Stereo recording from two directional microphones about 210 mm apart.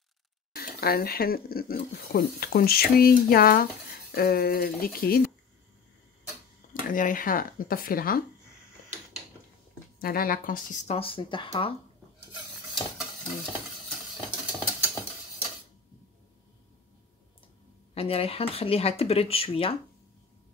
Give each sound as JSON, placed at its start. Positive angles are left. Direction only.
{"t": 0.6, "sound": "speech", "side_deg": 45}
{"t": 6.7, "sound": "speech", "side_deg": 40}
{"t": 9.9, "sound": "speech", "side_deg": 45}
{"t": 14.4, "sound": "a sound", "side_deg": -10}
{"t": 17.9, "sound": "speech", "side_deg": 30}